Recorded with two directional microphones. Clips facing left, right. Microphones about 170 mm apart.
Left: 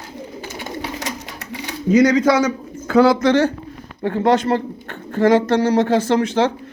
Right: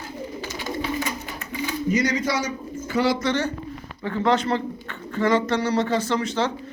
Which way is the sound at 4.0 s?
45° left (ahead or behind).